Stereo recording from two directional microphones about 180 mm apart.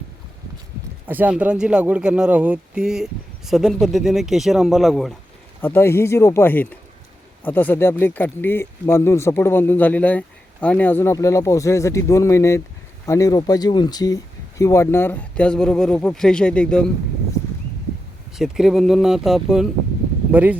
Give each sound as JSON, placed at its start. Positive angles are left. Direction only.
{"t": 1.0, "sound": "speech", "side_deg": -10}
{"t": 5.6, "sound": "speech", "side_deg": 15}
{"t": 18.3, "sound": "speech", "side_deg": 0}